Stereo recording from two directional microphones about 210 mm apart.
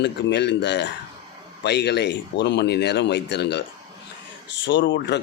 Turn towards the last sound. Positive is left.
turn(degrees=55)  # may be behind; listen again after turning